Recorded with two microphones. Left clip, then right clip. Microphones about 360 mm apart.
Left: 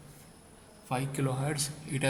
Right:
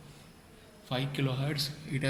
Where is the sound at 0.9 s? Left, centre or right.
Left.